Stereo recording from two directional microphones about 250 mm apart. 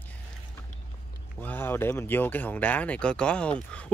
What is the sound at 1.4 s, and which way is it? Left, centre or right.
Speech, centre.